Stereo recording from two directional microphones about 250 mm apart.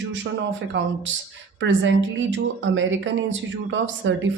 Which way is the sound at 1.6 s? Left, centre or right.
Right.